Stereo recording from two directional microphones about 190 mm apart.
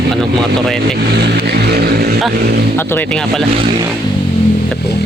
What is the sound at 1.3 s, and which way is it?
Vehicle, 55° right (ahead or behind).